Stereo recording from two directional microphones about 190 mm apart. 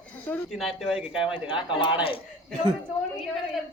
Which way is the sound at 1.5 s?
25° left (ahead or behind).